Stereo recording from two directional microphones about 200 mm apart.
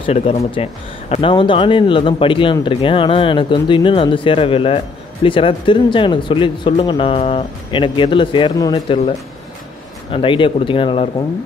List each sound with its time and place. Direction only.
0.0 s a man's voice: 30° left (ahead or behind)
10.1 s a man's voice: 25° left (ahead or behind)